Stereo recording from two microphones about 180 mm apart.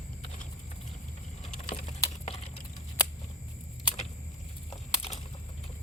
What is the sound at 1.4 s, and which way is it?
Typing, 40° left (ahead or behind).